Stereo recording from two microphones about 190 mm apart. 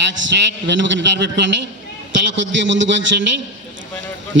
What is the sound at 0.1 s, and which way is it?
A man's voice, 75° right (ahead or behind).